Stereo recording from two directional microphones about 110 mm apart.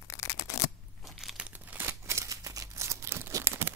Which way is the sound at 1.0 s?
Centre (ahead or behind).